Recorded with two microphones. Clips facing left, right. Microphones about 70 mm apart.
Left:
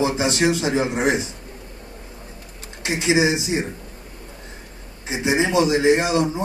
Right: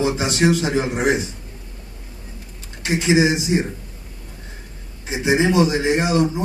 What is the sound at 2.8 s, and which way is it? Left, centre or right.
Speech, left.